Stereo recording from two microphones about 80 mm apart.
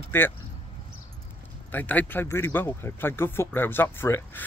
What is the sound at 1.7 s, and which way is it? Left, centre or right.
Speech, left.